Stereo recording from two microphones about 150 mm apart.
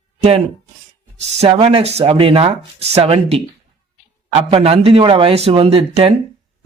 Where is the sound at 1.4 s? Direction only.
40° right (ahead or behind).